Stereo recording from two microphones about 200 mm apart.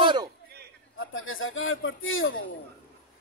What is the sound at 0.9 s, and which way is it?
A man's voice, 80° left.